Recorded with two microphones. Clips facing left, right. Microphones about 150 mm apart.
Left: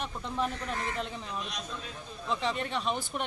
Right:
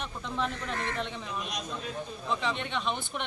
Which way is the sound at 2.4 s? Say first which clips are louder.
Even; 40° left (ahead or behind).